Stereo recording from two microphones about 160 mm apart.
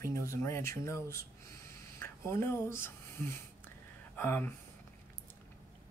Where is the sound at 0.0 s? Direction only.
20° left (ahead or behind).